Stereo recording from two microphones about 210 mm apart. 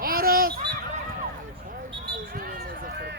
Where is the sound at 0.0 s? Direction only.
45° right (ahead or behind).